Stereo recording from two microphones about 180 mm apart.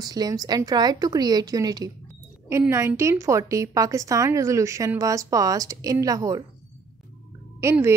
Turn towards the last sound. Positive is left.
turn(degrees=-15)  # may be behind; listen again after turning